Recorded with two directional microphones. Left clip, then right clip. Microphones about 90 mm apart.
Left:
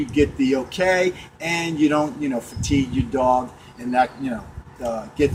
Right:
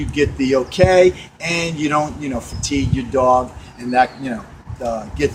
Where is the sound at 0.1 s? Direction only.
20° right (ahead or behind).